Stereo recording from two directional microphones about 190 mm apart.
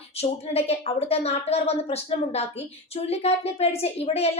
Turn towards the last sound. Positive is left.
turn(degrees=35)  # may be behind; listen again after turning